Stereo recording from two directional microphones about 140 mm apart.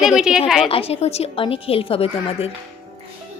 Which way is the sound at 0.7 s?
45° left (ahead or behind).